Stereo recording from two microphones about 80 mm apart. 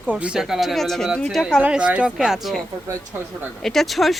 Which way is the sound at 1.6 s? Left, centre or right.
Centre.